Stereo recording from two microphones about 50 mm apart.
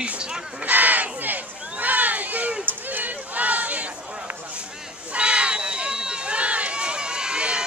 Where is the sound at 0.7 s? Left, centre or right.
Right.